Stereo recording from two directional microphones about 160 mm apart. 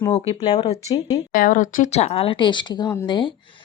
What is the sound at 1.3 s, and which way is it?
A woman's voice, 60° left (ahead or behind).